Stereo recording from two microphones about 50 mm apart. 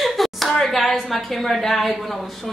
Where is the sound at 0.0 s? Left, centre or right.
Centre.